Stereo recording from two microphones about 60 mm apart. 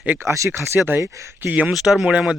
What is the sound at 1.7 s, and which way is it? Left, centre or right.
Speech, centre.